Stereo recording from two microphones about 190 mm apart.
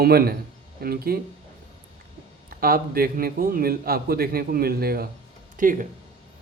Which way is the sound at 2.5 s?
50° right (ahead or behind).